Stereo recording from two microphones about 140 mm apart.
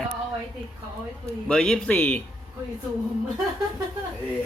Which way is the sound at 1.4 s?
5° left (ahead or behind).